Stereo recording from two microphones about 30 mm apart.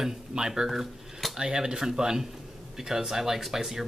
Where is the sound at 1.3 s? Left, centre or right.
Right.